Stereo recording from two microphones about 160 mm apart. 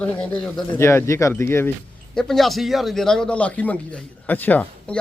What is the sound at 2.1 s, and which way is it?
Speech, centre (ahead or behind).